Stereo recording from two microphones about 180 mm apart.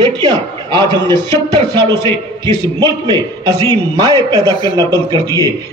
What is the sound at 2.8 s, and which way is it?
A man's voice, 20° right (ahead or behind).